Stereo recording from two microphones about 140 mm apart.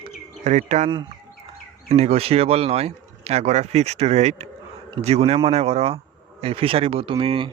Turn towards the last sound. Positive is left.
turn(degrees=-40)  # may be behind; listen again after turning